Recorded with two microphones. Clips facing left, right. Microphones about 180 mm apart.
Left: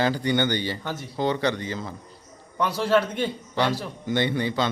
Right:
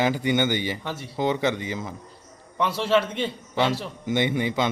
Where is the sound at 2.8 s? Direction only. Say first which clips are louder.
Left 1 dB; centre (ahead or behind).